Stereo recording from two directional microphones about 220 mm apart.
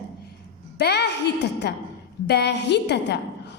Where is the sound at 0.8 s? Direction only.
50° left (ahead or behind).